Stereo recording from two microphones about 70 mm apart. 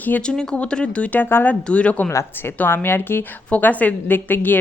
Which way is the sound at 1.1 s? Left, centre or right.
Left.